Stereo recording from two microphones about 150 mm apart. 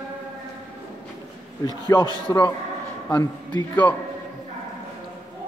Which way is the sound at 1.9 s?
20° left (ahead or behind).